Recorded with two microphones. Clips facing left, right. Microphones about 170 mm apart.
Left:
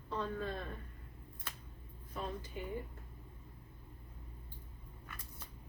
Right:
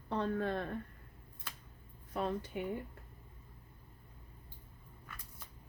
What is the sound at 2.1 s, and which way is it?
Speech, 65° right (ahead or behind).